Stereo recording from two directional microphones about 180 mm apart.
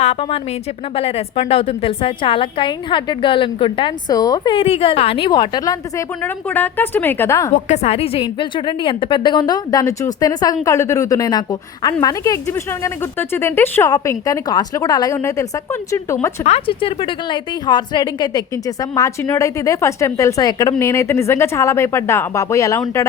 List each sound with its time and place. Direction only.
0.0 s a woman's voice: 35° left (ahead or behind); by 7.5 s 15° left (ahead or behind)
7.5 s a woman's voice: 40° left (ahead or behind); by 16.1 s 15° left (ahead or behind)
16.4 s a woman's voice: 35° left (ahead or behind); by 22.8 s 15° left (ahead or behind)